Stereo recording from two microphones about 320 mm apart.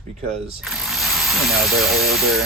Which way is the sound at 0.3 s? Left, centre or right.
Centre.